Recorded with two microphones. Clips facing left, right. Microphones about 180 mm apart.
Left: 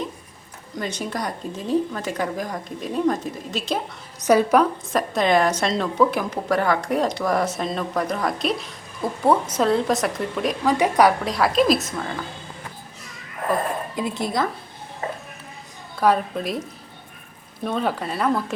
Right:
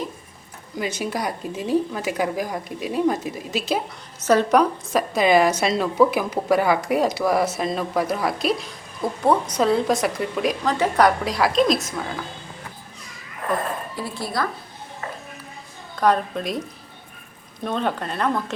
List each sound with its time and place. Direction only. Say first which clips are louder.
0.8 s a woman's voice: right 2 dB; 5° right (ahead or behind)
4.2 s a woman's voice: left 1 dB; 10° left (ahead or behind)
4.5 s a woman's voice: even; centre (ahead or behind)
10.7 s a woman's voice: left 2 dB; 15° left (ahead or behind)
11.2 s a woman's voice: even; centre (ahead or behind)
13.9 s speech: left 3 dB; 20° left (ahead or behind)
16.0 s a woman's voice: even; 5° left (ahead or behind)